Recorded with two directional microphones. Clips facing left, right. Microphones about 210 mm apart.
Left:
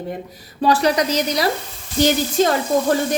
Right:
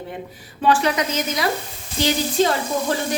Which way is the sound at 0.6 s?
35° left (ahead or behind).